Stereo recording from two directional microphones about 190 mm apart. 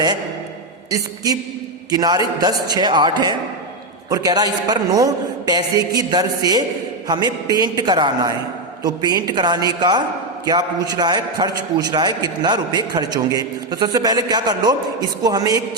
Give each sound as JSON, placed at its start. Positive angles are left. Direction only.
{"t": 0.9, "sound": "a man's voice", "side_deg": -20}